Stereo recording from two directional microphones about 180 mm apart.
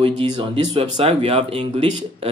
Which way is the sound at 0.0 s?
30° right (ahead or behind).